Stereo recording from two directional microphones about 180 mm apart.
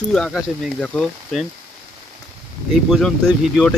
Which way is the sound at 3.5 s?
5° left (ahead or behind).